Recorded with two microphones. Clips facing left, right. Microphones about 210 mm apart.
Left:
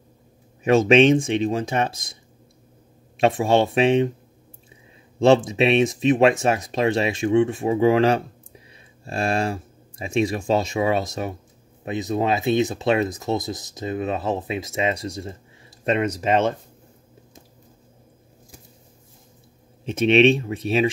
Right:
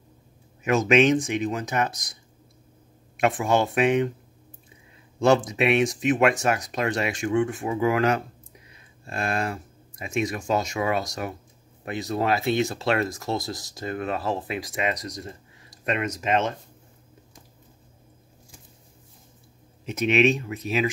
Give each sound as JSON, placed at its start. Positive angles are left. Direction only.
{"t": 0.7, "sound": "speech", "side_deg": 30}
{"t": 3.2, "sound": "speech", "side_deg": 25}
{"t": 5.2, "sound": "speech", "side_deg": 25}
{"t": 19.9, "sound": "speech", "side_deg": 30}